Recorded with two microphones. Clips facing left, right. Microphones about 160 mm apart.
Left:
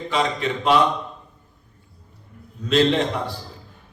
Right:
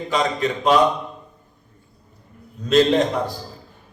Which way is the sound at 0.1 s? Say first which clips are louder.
Right 2 dB; 40° right (ahead or behind).